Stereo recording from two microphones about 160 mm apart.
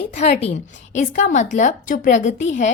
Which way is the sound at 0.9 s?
50° left (ahead or behind).